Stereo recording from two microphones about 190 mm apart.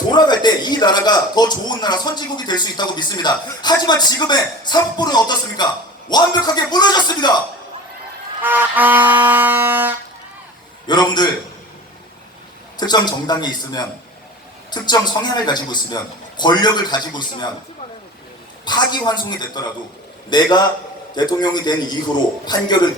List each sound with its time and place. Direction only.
0.1 s speech: 20° left (ahead or behind)
8.4 s music: 10° right (ahead or behind)
10.8 s a man's voice: 20° left (ahead or behind)
12.8 s speech: 20° left (ahead or behind)
18.6 s speech: 20° left (ahead or behind)